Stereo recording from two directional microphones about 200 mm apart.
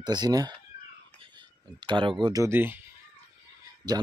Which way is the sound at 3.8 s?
20° right (ahead or behind).